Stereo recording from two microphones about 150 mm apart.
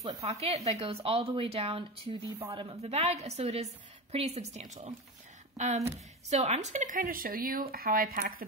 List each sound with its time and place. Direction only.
0.2 s speech: 45° right (ahead or behind)
6.3 s speech: 45° right (ahead or behind); by 8.5 s 75° right (ahead or behind)